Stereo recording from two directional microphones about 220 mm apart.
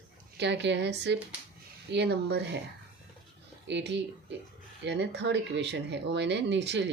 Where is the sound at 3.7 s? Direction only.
55° right (ahead or behind).